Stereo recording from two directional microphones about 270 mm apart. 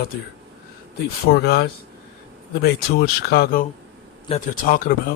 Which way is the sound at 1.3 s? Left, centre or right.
Left.